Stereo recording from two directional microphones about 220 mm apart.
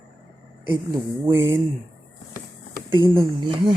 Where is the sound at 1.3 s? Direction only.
10° right (ahead or behind).